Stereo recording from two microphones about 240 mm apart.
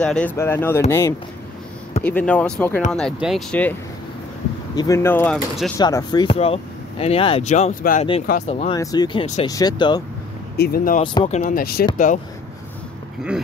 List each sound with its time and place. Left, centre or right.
0.0 s speech: centre
4.7 s speech: centre
5.8 s speech: centre
10.6 s speech: left
11.0 s speech: left